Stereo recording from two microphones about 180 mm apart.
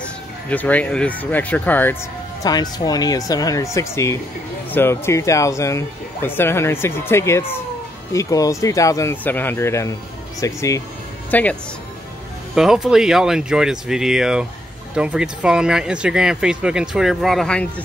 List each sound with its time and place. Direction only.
0.5 s speech: 10° left (ahead or behind)
2.4 s speech: 20° left (ahead or behind)
12.5 s speech: centre (ahead or behind)